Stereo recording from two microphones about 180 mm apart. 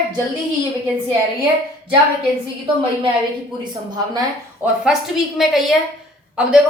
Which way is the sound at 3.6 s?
20° right (ahead or behind).